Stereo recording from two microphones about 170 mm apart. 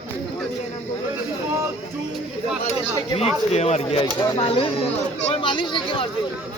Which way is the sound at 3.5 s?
40° left (ahead or behind).